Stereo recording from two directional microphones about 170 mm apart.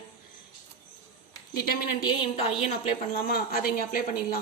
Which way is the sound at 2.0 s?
35° left (ahead or behind).